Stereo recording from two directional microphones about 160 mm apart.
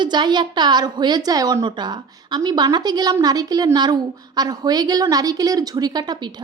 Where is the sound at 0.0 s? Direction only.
25° right (ahead or behind).